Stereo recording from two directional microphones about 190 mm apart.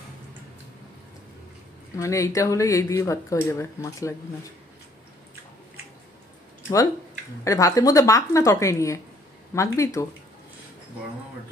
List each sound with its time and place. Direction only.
2.0 s speech: 15° left (ahead or behind)
7.4 s speech: 15° left (ahead or behind)